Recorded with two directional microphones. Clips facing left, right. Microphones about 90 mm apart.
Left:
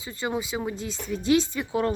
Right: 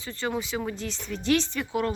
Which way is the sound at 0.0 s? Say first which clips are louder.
Left 1 dB; 15° left (ahead or behind).